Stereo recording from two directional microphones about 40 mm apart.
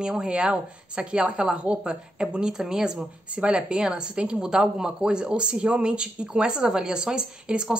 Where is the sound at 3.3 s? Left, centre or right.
Right.